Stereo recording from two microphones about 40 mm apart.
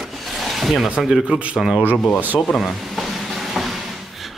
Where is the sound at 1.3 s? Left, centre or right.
Right.